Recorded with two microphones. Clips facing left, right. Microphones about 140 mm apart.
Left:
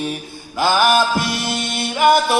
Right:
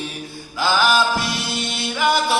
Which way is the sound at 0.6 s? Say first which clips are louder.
Left 3 dB; 50° left (ahead or behind).